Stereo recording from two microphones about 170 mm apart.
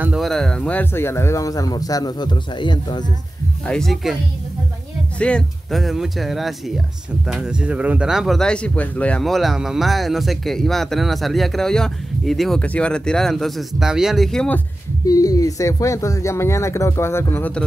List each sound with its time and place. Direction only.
0.0 s speech: 5° right (ahead or behind); by 3.1 s 25° left (ahead or behind)
3.6 s speech: 5° left (ahead or behind)
5.2 s speech: 5° left (ahead or behind)
15.0 s speech: 20° left (ahead or behind)